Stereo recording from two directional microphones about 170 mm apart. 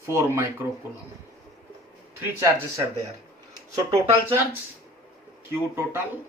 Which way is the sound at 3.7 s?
15° right (ahead or behind).